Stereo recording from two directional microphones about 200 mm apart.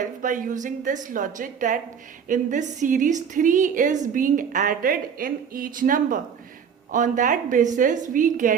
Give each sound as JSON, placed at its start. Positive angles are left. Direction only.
{"t": 0.0, "sound": "a woman's voice", "side_deg": -40}